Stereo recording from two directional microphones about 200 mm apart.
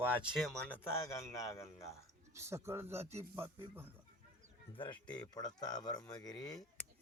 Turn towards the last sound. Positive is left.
turn(degrees=20)  # may be behind; listen again after turning